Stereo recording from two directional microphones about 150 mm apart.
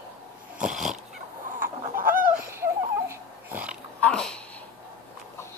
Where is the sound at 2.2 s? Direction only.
15° right (ahead or behind).